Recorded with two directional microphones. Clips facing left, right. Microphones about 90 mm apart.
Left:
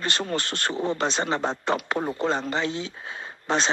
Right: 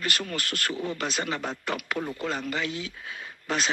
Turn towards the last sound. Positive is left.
turn(degrees=30)  # may be behind; listen again after turning